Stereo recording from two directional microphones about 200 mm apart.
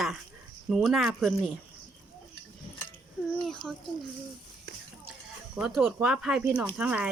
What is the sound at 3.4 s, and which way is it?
Speech, centre (ahead or behind).